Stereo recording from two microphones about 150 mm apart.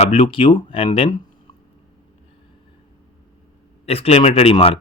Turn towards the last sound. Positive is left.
turn(degrees=35)  # may be behind; listen again after turning